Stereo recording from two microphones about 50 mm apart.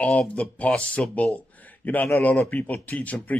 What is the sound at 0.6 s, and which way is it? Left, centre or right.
Speech, left.